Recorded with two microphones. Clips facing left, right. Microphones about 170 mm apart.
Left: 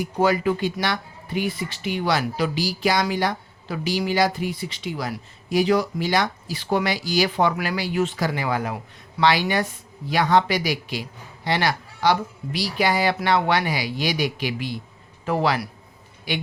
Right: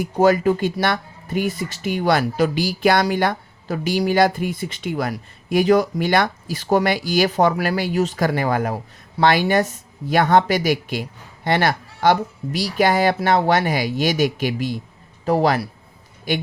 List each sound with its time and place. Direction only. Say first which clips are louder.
0.0 s a man's voice: right 5 dB; 45° right (ahead or behind)